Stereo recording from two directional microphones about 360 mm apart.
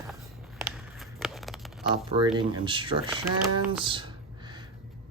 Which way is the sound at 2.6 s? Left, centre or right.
Centre.